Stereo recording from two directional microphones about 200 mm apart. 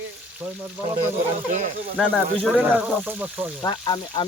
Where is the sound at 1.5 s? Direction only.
40° right (ahead or behind).